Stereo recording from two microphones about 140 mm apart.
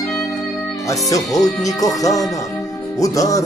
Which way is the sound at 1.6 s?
25° left (ahead or behind).